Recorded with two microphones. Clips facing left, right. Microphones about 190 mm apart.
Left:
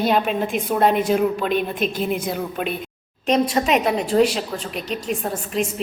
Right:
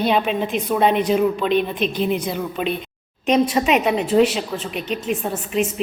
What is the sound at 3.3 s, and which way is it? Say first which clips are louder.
A woman's voice: right 1 dB; 10° right (ahead or behind).